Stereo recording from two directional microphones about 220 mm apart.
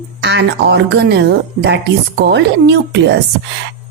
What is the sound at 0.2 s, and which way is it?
A woman's voice, 50° right (ahead or behind).